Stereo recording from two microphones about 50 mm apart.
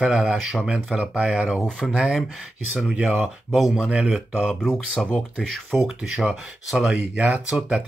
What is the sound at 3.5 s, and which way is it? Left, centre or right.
Speech, centre.